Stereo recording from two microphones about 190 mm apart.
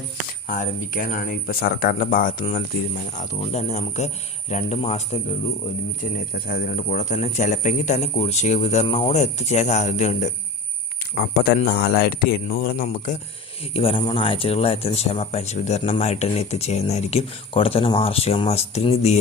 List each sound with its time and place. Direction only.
0.4 s speech: 45° left (ahead or behind)
6.5 s speech: 45° left (ahead or behind)
11.1 s speech: 55° left (ahead or behind)
13.7 s speech: 30° left (ahead or behind)